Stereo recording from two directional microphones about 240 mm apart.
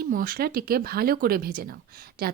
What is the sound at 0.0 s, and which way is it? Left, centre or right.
Speech, right.